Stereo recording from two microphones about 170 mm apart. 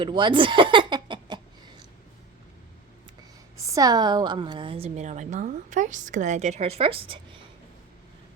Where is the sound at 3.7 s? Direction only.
20° right (ahead or behind).